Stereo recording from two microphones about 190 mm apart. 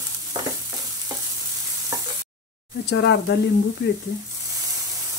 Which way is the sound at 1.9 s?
20° right (ahead or behind).